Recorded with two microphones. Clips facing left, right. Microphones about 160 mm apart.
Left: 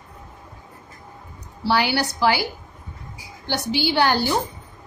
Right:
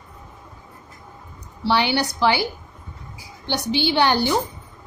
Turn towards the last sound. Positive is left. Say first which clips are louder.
# right 1 dB
turn(degrees=-20)  # may be behind; listen again after turning